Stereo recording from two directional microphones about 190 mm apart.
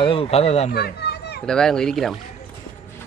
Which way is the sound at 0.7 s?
60° left (ahead or behind).